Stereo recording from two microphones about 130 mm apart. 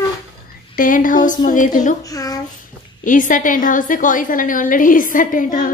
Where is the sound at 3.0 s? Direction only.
90° left.